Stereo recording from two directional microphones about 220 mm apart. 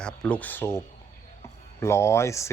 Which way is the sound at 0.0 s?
5° left (ahead or behind).